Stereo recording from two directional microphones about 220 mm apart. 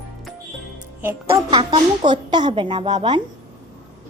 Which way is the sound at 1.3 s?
20° right (ahead or behind).